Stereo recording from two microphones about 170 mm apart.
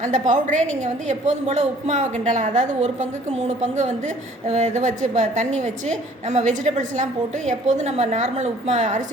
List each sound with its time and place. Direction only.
0.0 s a woman's voice: 45° right (ahead or behind)